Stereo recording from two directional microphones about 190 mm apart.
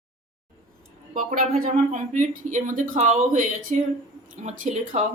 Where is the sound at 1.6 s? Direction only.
40° right (ahead or behind).